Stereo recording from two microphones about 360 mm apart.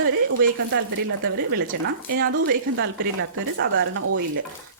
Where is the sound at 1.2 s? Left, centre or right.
Right.